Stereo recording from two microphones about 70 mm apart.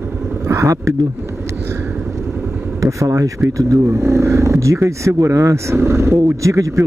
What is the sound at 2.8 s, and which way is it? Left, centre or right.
Speech, right.